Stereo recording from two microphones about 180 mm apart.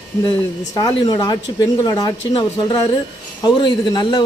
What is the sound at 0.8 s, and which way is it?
Speech, 20° left (ahead or behind).